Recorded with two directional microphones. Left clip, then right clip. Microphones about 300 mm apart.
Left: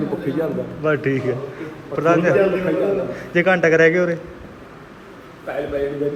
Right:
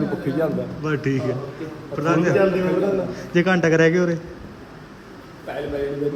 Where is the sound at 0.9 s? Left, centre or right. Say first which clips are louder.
Left 5 dB; centre.